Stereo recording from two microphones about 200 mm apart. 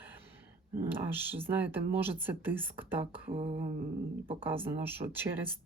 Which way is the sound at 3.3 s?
30° right (ahead or behind).